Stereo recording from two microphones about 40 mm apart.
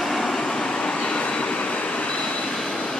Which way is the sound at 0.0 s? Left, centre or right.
Centre.